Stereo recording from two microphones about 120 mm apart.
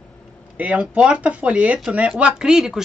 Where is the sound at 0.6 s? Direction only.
10° right (ahead or behind).